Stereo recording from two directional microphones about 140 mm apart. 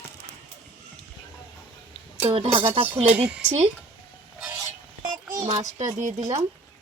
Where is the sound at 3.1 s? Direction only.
5° right (ahead or behind).